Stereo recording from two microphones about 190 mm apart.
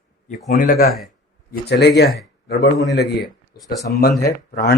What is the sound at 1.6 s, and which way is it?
A man's voice, 60° left (ahead or behind).